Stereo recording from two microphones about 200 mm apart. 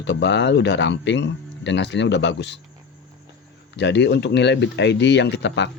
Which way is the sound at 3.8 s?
60° left (ahead or behind).